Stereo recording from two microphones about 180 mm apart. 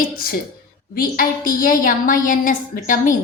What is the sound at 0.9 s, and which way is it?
A woman's voice, 55° left (ahead or behind).